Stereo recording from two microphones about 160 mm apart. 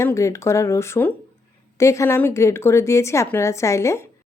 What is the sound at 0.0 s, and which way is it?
Speech, 20° left (ahead or behind).